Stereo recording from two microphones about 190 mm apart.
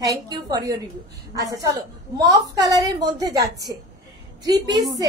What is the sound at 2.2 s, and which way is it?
A woman's voice, 20° right (ahead or behind).